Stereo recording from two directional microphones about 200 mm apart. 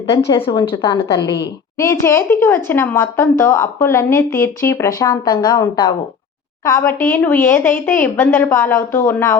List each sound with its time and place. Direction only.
0.1 s a woman's voice: 25° left (ahead or behind)